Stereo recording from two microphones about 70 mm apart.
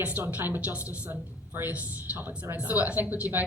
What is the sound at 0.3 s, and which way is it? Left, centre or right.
A woman's voice, right.